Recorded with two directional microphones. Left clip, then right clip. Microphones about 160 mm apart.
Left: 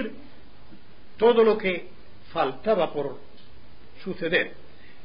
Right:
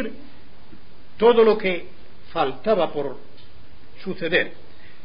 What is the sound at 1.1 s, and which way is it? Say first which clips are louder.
A man's voice: right 3 dB; 25° left (ahead or behind).